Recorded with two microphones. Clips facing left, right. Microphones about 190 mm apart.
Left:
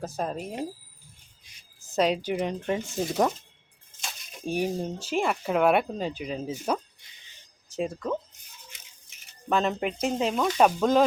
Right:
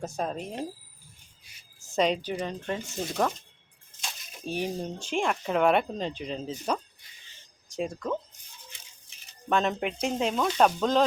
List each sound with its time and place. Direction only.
0.2 s speech: 5° left (ahead or behind)
1.8 s speech: centre (ahead or behind)
4.4 s speech: 10° left (ahead or behind)
7.8 s speech: 5° left (ahead or behind)
9.5 s speech: centre (ahead or behind)